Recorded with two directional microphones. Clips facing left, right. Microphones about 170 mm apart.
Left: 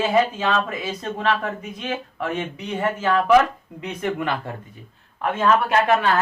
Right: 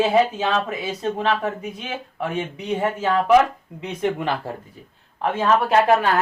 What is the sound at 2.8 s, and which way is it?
Speech, 20° right (ahead or behind).